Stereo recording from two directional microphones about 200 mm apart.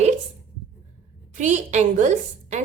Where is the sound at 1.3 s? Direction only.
35° right (ahead or behind).